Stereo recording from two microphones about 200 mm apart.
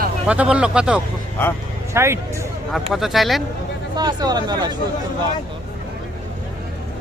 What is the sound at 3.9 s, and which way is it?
Speech, 20° right (ahead or behind).